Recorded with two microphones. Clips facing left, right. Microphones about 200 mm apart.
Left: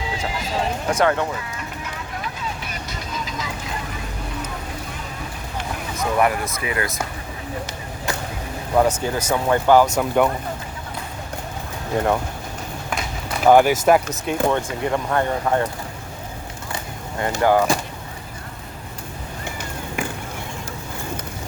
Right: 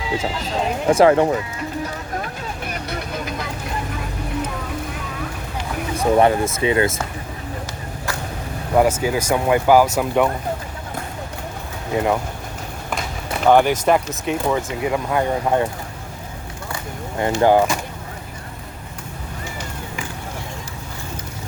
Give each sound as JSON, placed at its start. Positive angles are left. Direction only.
{"t": 0.3, "sound": "speech", "side_deg": 10}
{"t": 0.9, "sound": "speech", "side_deg": -30}
{"t": 1.8, "sound": "vehicle", "side_deg": -45}
{"t": 6.0, "sound": "speech", "side_deg": -30}
{"t": 8.7, "sound": "speech", "side_deg": -10}
{"t": 11.9, "sound": "speech", "side_deg": 0}
{"t": 13.4, "sound": "speech", "side_deg": 5}
{"t": 17.2, "sound": "speech", "side_deg": -20}